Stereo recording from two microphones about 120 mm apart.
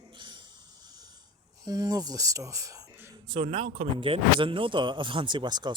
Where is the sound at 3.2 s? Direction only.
45° right (ahead or behind).